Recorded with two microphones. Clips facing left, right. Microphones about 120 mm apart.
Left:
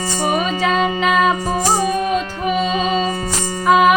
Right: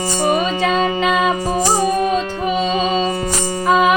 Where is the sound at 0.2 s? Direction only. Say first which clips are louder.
Right 2 dB; 5° left (ahead or behind).